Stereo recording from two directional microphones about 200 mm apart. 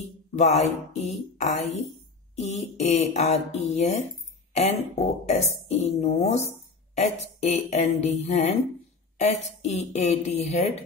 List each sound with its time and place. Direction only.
0.4 s a woman's voice: 35° left (ahead or behind)